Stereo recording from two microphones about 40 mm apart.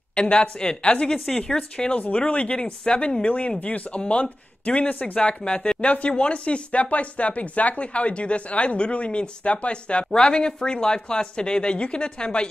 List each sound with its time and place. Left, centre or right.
0.1 s speech: left
1.0 s a woman's voice: centre
1.6 s speech: left